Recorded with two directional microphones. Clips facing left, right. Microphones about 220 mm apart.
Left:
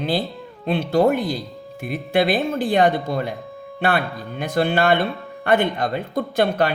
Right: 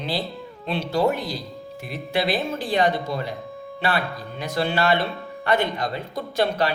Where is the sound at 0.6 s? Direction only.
55° left (ahead or behind).